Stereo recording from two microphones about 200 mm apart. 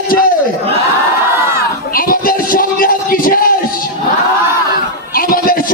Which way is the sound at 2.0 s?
45° left (ahead or behind).